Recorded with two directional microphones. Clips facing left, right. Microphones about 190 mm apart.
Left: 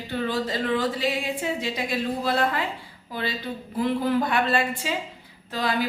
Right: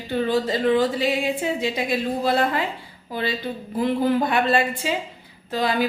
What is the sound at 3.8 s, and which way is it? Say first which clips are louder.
Speech: right 3 dB; 25° right (ahead or behind).